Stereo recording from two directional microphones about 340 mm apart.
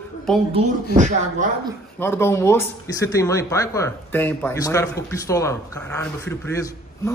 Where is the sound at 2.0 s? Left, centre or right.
Centre.